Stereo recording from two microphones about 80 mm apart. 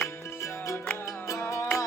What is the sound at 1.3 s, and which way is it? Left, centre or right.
Music, left.